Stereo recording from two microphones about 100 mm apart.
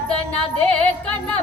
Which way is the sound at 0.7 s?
15° left (ahead or behind).